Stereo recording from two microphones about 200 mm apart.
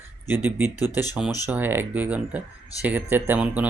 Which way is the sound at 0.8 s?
20° left (ahead or behind).